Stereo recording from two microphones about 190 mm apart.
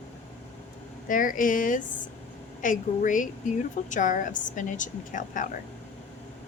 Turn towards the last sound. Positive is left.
turn(degrees=45)  # may be behind; listen again after turning